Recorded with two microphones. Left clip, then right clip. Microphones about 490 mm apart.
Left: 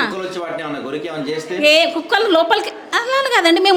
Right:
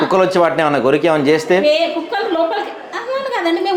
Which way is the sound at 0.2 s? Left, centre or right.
Right.